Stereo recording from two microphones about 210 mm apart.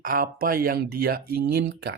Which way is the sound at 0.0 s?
45° right (ahead or behind).